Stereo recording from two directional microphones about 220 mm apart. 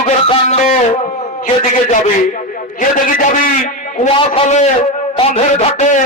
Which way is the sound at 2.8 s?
35° left (ahead or behind).